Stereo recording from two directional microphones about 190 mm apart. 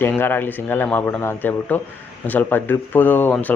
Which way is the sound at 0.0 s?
10° left (ahead or behind).